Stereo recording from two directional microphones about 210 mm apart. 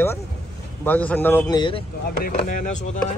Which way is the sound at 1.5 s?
25° left (ahead or behind).